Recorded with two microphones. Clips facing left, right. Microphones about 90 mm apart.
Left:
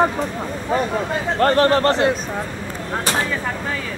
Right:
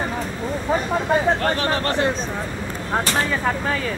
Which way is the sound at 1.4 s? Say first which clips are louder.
Left 7 dB; 45° left (ahead or behind).